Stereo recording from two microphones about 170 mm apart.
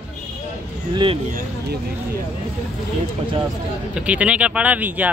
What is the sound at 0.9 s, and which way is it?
Speech, 25° right (ahead or behind).